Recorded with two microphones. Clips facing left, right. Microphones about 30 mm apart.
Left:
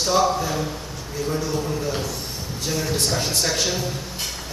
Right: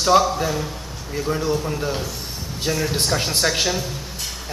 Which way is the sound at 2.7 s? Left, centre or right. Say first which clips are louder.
Right 2 dB; centre.